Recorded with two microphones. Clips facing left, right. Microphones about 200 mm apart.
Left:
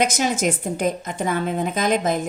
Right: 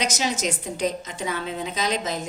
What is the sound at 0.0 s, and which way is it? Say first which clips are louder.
A woman's voice: left 5 dB; 50° left (ahead or behind).